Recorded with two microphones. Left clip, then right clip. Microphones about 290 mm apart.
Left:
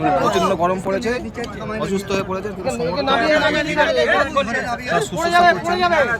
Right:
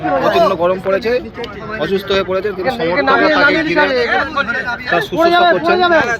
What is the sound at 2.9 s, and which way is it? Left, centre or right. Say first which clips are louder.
Speech: right 6 dB; right.